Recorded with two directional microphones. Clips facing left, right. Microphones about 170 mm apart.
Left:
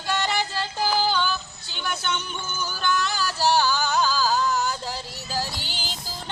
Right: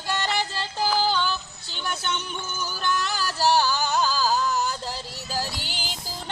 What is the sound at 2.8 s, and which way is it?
Music, 40° right (ahead or behind).